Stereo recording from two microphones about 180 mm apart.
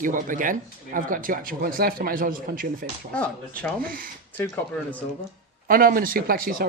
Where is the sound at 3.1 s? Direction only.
5° left (ahead or behind).